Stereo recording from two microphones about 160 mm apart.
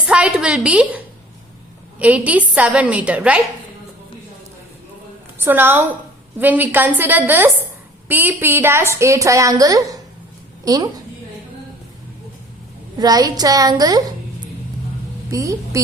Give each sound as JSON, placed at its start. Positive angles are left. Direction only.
{"t": 0.1, "sound": "a woman's voice", "side_deg": -5}
{"t": 5.4, "sound": "a woman's voice", "side_deg": -15}
{"t": 13.0, "sound": "a woman's voice", "side_deg": -25}
{"t": 15.3, "sound": "a woman's voice", "side_deg": -20}